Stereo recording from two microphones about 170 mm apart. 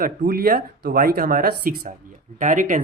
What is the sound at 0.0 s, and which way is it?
Speech, 60° right (ahead or behind).